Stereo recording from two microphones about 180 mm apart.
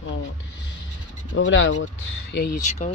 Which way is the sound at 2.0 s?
65° left (ahead or behind).